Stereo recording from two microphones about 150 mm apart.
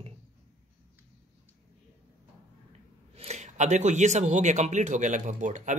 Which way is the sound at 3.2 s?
50° right (ahead or behind).